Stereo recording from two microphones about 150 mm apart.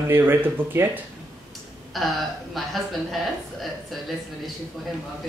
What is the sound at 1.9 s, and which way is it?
A woman's voice, centre (ahead or behind).